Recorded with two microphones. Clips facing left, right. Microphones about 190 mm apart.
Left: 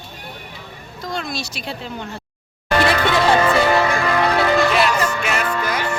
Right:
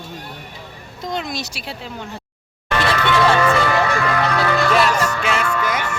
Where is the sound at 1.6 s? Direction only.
5° right (ahead or behind).